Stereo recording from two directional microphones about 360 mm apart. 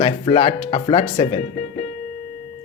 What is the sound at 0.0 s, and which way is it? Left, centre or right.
Speech, centre.